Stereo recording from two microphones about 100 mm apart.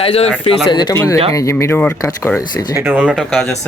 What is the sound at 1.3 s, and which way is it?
Speech, 30° left (ahead or behind).